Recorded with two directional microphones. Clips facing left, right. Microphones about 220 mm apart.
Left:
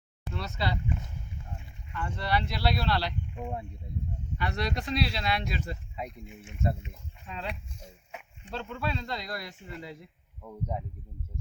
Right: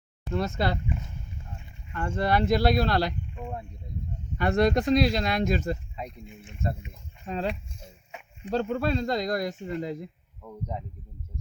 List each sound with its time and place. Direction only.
0.3 s speech: 50° right (ahead or behind)
1.9 s speech: 45° right (ahead or behind)
3.3 s speech: 10° left (ahead or behind)
4.4 s speech: 50° right (ahead or behind)
6.0 s speech: 5° left (ahead or behind)
7.3 s speech: 45° right (ahead or behind)
10.4 s speech: 5° left (ahead or behind)